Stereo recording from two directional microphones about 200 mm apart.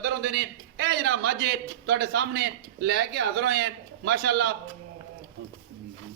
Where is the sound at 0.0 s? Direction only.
60° right (ahead or behind).